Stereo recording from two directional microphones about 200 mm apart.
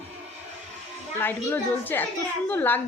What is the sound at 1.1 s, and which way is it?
Speech, 10° left (ahead or behind).